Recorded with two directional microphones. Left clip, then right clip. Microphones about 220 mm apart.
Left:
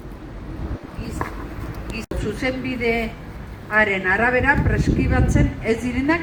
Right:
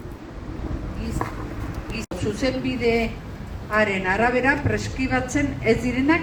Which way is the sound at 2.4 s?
30° left (ahead or behind).